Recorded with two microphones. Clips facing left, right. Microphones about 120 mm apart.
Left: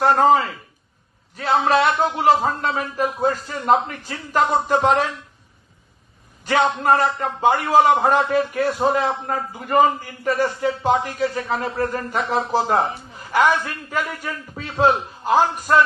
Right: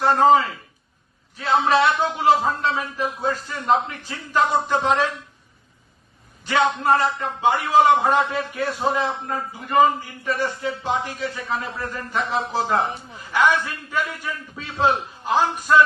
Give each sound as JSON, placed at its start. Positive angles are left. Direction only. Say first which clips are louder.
{"t": 0.0, "sound": "a man's voice", "louder": "even", "side_deg": 45}
{"t": 6.4, "sound": "a man's voice", "louder": "left 2 dB", "side_deg": 45}
{"t": 10.2, "sound": "a man's voice", "louder": "left 5 dB", "side_deg": 45}